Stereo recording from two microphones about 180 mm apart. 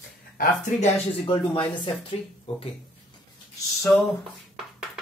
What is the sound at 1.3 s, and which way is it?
Speech, 25° left (ahead or behind).